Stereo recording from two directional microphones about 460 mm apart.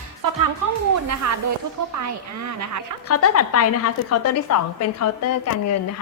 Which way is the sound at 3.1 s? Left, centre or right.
Left.